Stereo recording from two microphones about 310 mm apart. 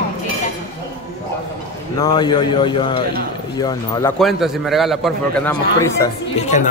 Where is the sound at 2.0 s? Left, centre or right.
Centre.